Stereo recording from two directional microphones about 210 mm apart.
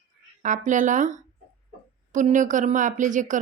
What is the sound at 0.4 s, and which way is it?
Speech, 35° right (ahead or behind).